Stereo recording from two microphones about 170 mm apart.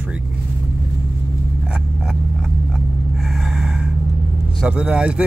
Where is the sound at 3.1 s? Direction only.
Centre (ahead or behind).